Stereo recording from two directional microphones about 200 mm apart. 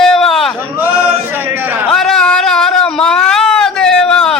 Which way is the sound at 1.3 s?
10° right (ahead or behind).